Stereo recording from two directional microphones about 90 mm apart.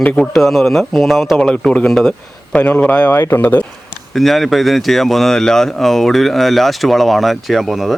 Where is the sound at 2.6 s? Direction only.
20° left (ahead or behind).